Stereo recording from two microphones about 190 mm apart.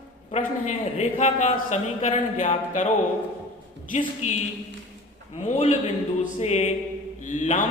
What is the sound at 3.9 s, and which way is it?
Speech, 40° left (ahead or behind).